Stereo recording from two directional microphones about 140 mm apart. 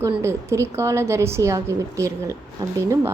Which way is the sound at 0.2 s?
20° right (ahead or behind).